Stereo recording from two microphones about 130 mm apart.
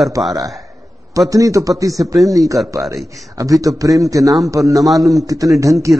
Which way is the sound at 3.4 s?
25° right (ahead or behind).